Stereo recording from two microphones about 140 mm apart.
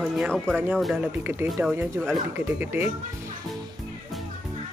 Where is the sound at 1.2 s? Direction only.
10° right (ahead or behind).